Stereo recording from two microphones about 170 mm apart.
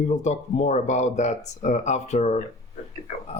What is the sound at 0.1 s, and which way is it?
Speech, 45° left (ahead or behind).